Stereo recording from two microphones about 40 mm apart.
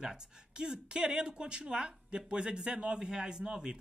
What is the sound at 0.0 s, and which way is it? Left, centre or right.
Speech, centre.